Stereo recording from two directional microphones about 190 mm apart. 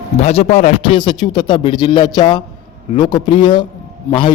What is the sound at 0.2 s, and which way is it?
A man's voice, 35° left (ahead or behind).